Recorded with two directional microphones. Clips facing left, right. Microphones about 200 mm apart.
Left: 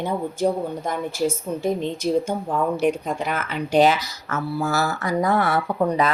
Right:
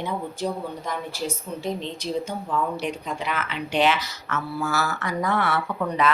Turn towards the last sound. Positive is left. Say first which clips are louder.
# left 4 dB
turn(degrees=40)  # may be behind; listen again after turning